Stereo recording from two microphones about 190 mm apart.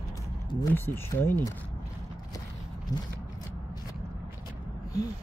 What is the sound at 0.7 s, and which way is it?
Speech, 10° left (ahead or behind).